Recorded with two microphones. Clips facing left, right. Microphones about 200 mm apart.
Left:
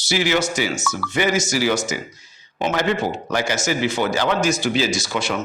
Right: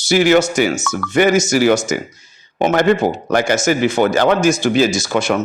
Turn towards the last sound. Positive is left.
turn(degrees=-50)  # may be behind; listen again after turning